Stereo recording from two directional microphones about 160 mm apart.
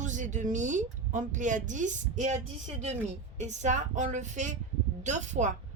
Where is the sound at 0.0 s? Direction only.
50° right (ahead or behind).